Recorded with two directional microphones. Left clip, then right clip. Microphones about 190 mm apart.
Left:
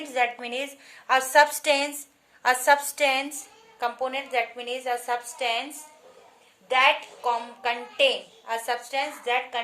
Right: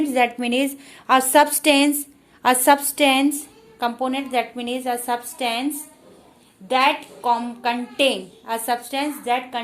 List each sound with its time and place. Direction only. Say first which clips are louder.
0.1 s a woman's voice: right 6 dB; 40° right (ahead or behind)